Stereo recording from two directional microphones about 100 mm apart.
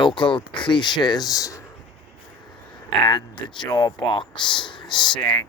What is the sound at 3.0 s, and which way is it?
Speech, 50° left (ahead or behind).